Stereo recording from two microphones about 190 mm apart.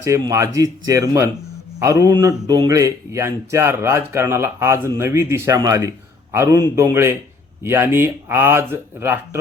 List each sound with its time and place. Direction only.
0.0 s a man's voice: 15° right (ahead or behind)